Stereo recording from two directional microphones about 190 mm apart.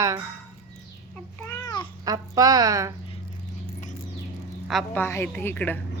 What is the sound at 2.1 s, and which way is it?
Speech, 20° right (ahead or behind).